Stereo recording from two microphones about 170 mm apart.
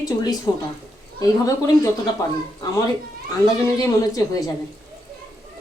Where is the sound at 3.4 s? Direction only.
20° left (ahead or behind).